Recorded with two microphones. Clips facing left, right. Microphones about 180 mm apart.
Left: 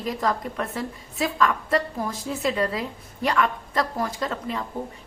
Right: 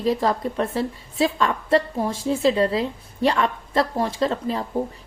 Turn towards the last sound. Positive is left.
turn(degrees=-30)  # may be behind; listen again after turning